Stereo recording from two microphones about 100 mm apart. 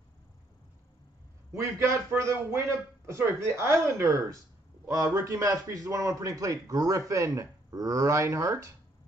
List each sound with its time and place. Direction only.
1.5 s a man's voice: 30° right (ahead or behind)